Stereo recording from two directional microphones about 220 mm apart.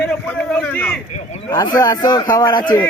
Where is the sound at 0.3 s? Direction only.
5° left (ahead or behind).